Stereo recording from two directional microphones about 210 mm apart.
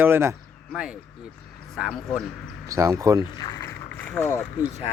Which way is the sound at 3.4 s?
20° left (ahead or behind).